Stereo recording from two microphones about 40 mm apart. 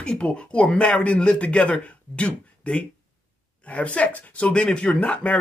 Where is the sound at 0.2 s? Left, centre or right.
Left.